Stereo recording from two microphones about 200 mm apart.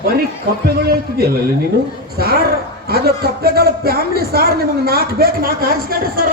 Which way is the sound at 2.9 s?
50° right (ahead or behind).